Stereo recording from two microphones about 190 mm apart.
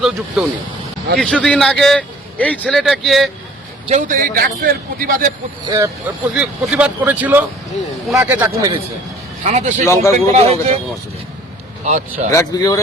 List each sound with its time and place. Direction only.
0.0 s a man's voice: centre (ahead or behind)
3.8 s a man's voice: 40° right (ahead or behind)
5.6 s speech: 15° right (ahead or behind)
6.3 s speech: 5° right (ahead or behind)
9.4 s speech: 40° right (ahead or behind)
9.8 s speech: 15° left (ahead or behind)
10.3 s speech: 35° right (ahead or behind)
11.9 s speech: 35° right (ahead or behind)
12.3 s speech: 20° left (ahead or behind)